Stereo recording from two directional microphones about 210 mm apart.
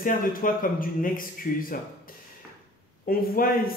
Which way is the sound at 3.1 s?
45° left (ahead or behind).